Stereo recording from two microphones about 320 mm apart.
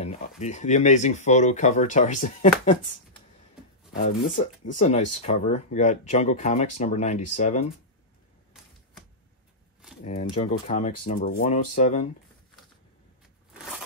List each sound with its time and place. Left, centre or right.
0.0 s speech: centre
3.9 s speech: left
10.0 s speech: centre